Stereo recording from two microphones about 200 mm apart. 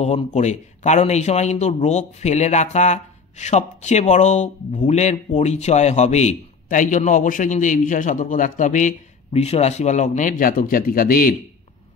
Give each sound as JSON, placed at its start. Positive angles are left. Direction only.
{"t": 0.0, "sound": "a man's voice", "side_deg": 35}